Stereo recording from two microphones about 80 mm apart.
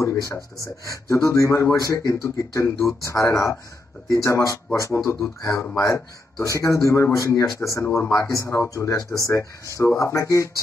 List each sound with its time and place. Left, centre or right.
0.0 s speech: left